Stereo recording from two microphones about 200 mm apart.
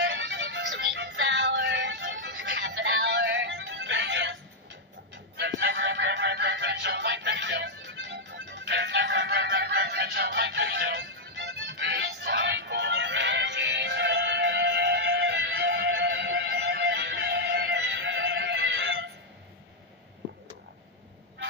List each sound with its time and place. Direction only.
0.0 s music: 65° right (ahead or behind)
5.4 s music: 60° right (ahead or behind)